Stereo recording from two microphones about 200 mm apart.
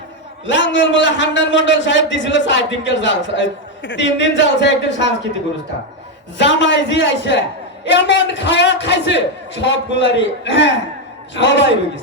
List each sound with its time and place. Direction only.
0.4 s a man's voice: 65° left (ahead or behind)
6.3 s a man's voice: 65° left (ahead or behind)